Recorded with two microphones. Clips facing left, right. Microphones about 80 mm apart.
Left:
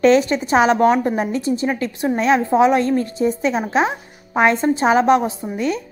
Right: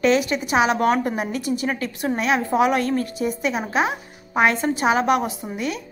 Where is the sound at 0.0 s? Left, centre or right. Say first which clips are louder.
Left 5 dB; left.